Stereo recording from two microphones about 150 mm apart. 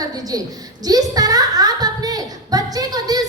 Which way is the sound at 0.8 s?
25° right (ahead or behind).